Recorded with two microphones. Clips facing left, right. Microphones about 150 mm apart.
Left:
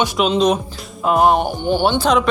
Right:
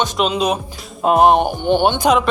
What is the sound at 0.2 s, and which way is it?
Speech, 5° right (ahead or behind).